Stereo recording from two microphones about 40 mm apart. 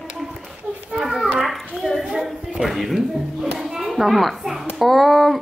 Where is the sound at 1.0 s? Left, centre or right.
Centre.